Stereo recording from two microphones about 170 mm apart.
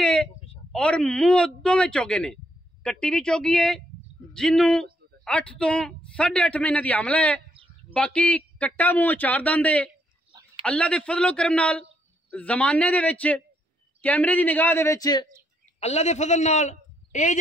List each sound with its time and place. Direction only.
0.0 s a sound: 5° left (ahead or behind)
0.7 s a man's voice: 5° left (ahead or behind); by 15.2 s 20° left (ahead or behind)
15.8 s a man's voice: 40° left (ahead or behind)